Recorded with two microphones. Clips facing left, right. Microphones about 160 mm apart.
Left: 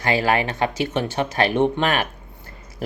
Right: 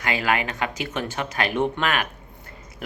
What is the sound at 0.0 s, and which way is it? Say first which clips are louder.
Speech: left 4 dB; 30° left (ahead or behind).